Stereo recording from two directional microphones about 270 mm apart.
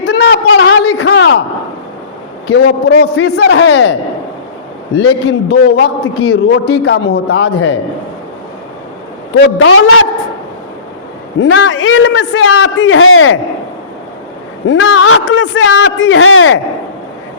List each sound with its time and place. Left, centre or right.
0.0 s a sound: left
2.5 s a man's voice: left
4.9 s a man's voice: left
9.4 s a man's voice: left
11.3 s a man's voice: left
14.7 s a man's voice: left